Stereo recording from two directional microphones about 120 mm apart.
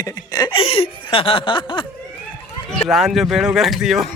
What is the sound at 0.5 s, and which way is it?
Chuckle, 50° left (ahead or behind).